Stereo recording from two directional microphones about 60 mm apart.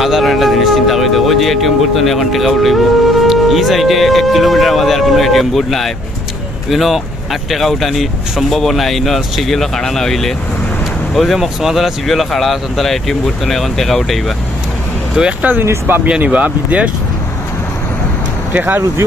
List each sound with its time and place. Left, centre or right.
0.0 s speech: centre
15.2 s speech: centre
15.6 s speech: right
16.2 s speech: right
18.5 s speech: right